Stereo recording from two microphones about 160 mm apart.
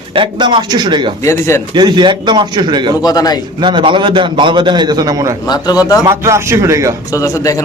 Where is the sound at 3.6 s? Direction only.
30° right (ahead or behind).